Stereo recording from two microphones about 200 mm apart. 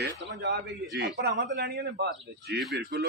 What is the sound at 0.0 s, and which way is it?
A man's voice, 60° right (ahead or behind).